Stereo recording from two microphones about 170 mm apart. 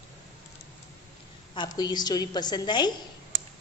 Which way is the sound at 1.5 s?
25° left (ahead or behind).